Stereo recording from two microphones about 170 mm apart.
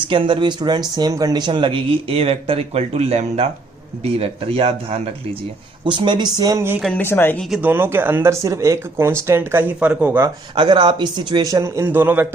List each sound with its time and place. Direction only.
0.0 s speech: 30° right (ahead or behind); by 6.8 s 15° right (ahead or behind)
6.8 s speech: 10° left (ahead or behind)
7.5 s speech: 10° right (ahead or behind)
10.5 s speech: 25° right (ahead or behind); by 12.3 s 10° right (ahead or behind)